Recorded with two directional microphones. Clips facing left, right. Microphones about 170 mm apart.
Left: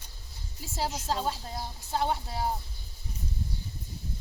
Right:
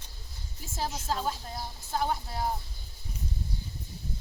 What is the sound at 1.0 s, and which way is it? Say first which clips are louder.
Speech: left 1 dB; 30° left (ahead or behind).